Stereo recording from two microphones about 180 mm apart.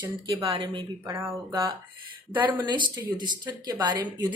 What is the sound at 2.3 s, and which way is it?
A woman's voice, 25° right (ahead or behind).